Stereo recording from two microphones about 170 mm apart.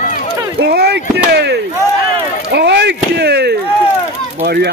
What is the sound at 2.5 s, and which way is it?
Chop, 85° right.